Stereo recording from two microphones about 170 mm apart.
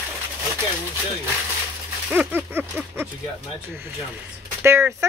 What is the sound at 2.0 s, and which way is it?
Speech, 10° right (ahead or behind).